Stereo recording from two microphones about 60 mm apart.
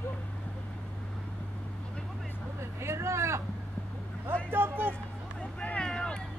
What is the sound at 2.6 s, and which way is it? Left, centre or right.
Speech, right.